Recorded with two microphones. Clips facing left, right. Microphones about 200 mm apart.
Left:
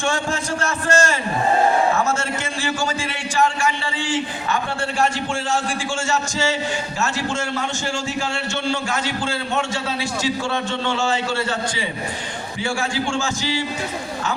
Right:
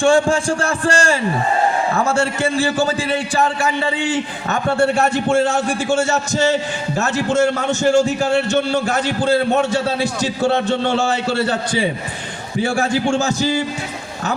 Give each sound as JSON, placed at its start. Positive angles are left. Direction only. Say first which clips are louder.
{"t": 0.0, "sound": "a man's voice", "louder": "right 9 dB", "side_deg": -30}
{"t": 6.0, "sound": "a man's voice", "louder": "right 5 dB", "side_deg": -40}
{"t": 10.4, "sound": "a man's voice", "louder": "right 7 dB", "side_deg": -40}
{"t": 12.6, "sound": "a man's voice", "louder": "right 5 dB", "side_deg": -40}